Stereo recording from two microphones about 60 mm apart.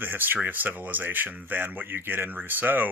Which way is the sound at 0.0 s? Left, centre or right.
Right.